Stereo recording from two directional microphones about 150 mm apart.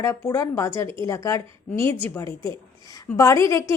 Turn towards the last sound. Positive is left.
turn(degrees=20)  # may be behind; listen again after turning